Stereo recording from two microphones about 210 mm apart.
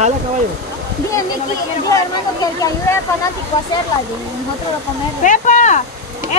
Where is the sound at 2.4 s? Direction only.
15° left (ahead or behind).